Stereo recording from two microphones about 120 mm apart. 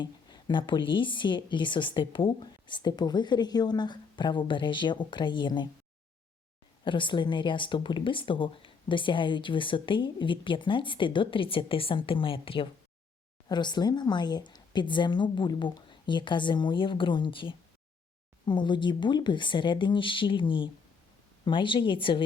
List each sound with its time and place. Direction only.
0.0 s a woman's voice: 40° left (ahead or behind)
6.8 s a woman's voice: 45° left (ahead or behind)